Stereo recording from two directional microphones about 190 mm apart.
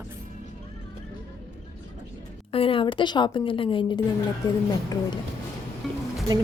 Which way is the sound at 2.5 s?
30° left (ahead or behind).